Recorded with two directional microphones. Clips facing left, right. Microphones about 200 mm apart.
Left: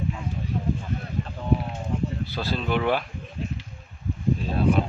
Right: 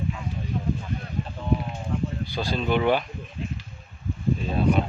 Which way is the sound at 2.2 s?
5° left (ahead or behind).